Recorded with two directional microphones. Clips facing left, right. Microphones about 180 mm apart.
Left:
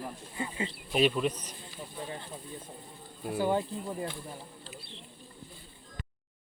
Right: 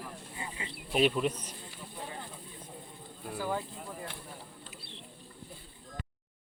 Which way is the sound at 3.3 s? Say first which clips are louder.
Left 6 dB; 25° left (ahead or behind).